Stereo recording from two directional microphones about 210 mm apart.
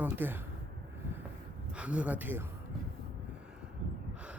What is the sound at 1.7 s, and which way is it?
Speech, 5° right (ahead or behind).